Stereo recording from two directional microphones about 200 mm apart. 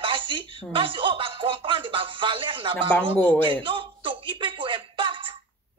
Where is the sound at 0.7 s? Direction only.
25° right (ahead or behind).